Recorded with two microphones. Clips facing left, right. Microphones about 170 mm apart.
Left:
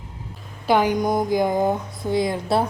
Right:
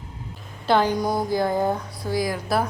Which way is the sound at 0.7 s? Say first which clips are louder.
Left 2 dB; 15° left (ahead or behind).